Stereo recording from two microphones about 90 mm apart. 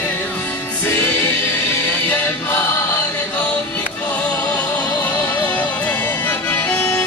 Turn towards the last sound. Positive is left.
turn(degrees=15)  # may be behind; listen again after turning